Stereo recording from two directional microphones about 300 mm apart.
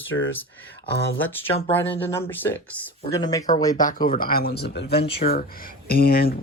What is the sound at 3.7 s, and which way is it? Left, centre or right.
Speech, left.